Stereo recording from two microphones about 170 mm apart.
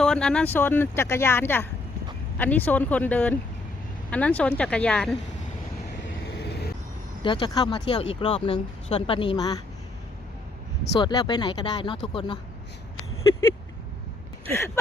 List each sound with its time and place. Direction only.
0.0 s speech: 5° left (ahead or behind)
6.0 s vehicle: 75° left (ahead or behind)
7.2 s speech: 25° left (ahead or behind)
11.0 s speech: 25° left (ahead or behind)
14.4 s speech: 15° left (ahead or behind)